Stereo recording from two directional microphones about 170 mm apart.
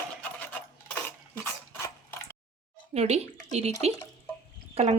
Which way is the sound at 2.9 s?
40° right (ahead or behind).